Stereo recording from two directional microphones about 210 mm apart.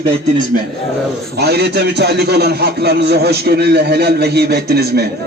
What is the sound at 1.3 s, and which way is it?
A man's voice, 50° right (ahead or behind).